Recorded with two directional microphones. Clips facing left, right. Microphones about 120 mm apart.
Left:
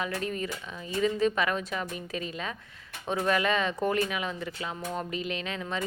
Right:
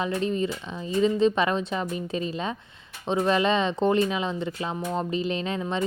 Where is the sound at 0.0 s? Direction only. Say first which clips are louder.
Right 6 dB; 25° right (ahead or behind).